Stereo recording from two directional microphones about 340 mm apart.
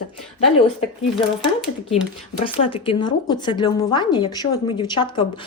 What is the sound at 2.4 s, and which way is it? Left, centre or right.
A woman's voice, centre.